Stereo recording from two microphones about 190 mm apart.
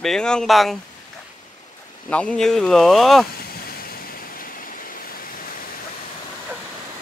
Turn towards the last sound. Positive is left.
turn(degrees=50)  # may be behind; listen again after turning